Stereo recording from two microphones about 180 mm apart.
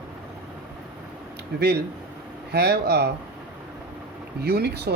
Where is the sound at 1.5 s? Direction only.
65° right (ahead or behind).